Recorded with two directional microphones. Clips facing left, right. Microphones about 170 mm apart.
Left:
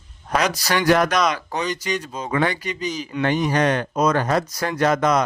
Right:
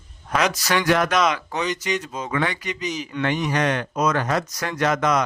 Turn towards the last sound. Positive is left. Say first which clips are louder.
# left 2 dB
turn(degrees=35)  # may be behind; listen again after turning